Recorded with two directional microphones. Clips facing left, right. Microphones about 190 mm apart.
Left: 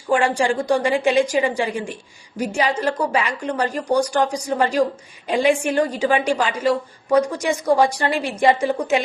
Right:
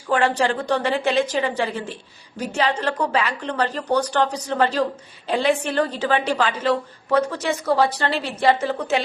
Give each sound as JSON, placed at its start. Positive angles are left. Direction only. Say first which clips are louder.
{"t": 0.1, "sound": "a woman's voice", "louder": "left 1 dB", "side_deg": 10}